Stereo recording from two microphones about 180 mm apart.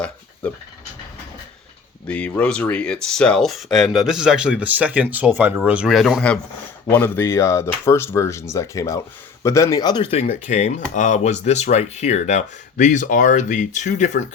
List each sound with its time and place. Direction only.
2.0 s speech: 5° left (ahead or behind); by 14.3 s 45° left (ahead or behind)